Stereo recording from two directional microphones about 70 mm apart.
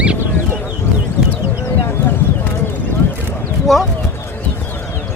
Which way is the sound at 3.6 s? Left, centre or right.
Centre.